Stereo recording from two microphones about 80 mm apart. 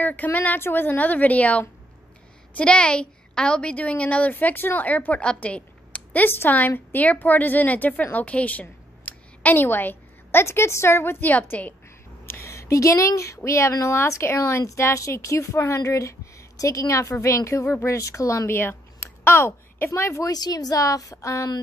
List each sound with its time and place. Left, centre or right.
0.0 s a woman's voice: left
12.3 s speech: left
18.5 s a sound: left
19.9 s speech: left
20.2 s a woman's voice: left